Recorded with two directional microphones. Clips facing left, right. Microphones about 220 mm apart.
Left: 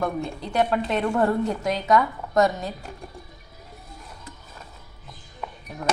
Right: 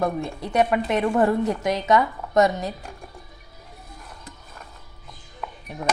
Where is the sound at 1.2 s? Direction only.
Centre (ahead or behind).